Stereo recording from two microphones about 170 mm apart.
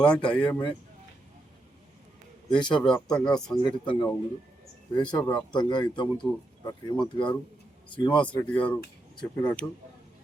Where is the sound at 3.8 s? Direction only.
30° left (ahead or behind).